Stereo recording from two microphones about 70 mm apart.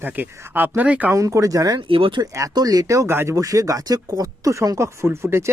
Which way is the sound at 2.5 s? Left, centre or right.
Right.